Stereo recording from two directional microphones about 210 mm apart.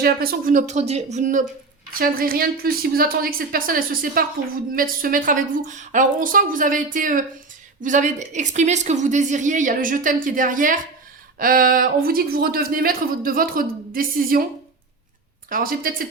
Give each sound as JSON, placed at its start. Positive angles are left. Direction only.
{"t": 0.0, "sound": "a woman's voice", "side_deg": -45}
{"t": 15.4, "sound": "speech", "side_deg": -40}